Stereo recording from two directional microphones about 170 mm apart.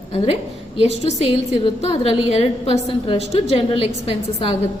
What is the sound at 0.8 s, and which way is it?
A woman's voice, 35° left (ahead or behind).